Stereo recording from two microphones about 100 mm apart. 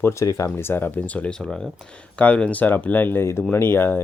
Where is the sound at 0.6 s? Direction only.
20° left (ahead or behind).